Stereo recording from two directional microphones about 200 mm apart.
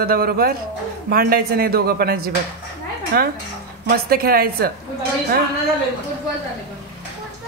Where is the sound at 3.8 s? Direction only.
50° right (ahead or behind).